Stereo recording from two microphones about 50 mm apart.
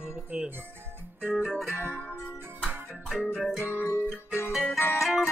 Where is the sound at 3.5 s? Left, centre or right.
Left.